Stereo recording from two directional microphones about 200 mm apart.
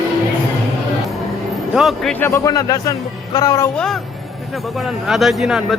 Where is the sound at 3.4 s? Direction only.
15° left (ahead or behind).